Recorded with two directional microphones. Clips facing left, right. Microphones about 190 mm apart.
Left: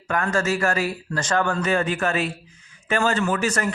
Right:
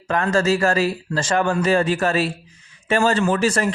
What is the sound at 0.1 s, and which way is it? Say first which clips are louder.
Speech: right 4 dB; 30° right (ahead or behind).